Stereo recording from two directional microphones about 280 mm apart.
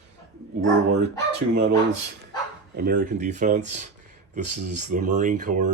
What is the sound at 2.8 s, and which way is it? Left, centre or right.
Speech, right.